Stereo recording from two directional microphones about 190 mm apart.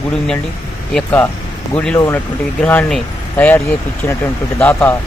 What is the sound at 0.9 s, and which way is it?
Speech, 10° left (ahead or behind).